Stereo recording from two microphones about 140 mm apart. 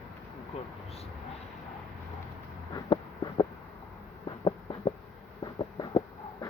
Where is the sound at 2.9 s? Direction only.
30° left (ahead or behind).